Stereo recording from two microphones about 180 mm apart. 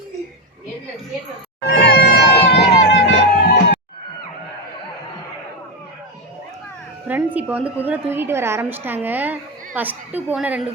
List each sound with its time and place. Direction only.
1.6 s music: 65° left (ahead or behind)
7.1 s a sound: 10° right (ahead or behind)
8.1 s a woman's voice: 15° right (ahead or behind)